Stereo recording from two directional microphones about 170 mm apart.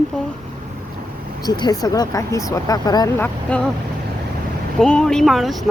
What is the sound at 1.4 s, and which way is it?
Speech, 25° left (ahead or behind).